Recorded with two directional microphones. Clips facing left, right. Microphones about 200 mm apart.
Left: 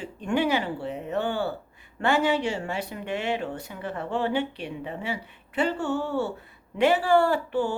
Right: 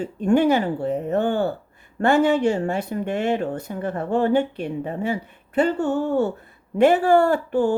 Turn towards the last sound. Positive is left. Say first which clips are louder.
# right 6 dB
turn(degrees=-45)  # may be behind; listen again after turning